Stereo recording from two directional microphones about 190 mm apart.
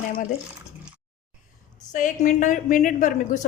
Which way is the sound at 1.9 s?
40° left (ahead or behind).